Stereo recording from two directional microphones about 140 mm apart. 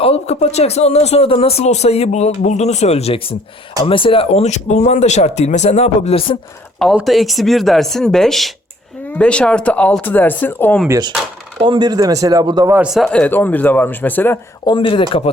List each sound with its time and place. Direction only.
0.0 s speech: 50° left (ahead or behind)
6.9 s speech: centre (ahead or behind)
10.8 s speech: 25° right (ahead or behind)
11.6 s speech: 35° right (ahead or behind)
12.7 s speech: 5° right (ahead or behind); by 14.3 s 15° left (ahead or behind)
14.6 s speech: 35° left (ahead or behind)